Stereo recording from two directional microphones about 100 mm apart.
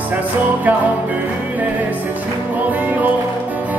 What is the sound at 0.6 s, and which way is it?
Music, 15° right (ahead or behind).